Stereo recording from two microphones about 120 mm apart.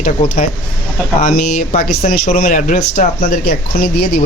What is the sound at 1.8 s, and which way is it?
Speech, 75° left (ahead or behind).